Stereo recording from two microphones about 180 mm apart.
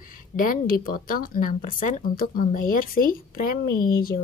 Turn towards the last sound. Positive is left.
turn(degrees=55)  # may be behind; listen again after turning